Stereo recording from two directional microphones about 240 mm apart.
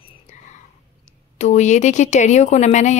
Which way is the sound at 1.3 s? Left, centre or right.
Left.